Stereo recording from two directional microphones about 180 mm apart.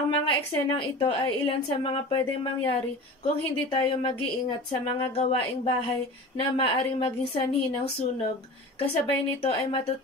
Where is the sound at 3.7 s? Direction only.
25° left (ahead or behind).